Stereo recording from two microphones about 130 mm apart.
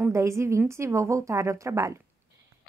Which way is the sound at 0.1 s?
25° right (ahead or behind).